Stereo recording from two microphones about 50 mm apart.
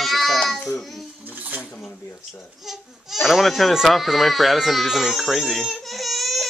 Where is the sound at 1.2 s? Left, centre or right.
Right.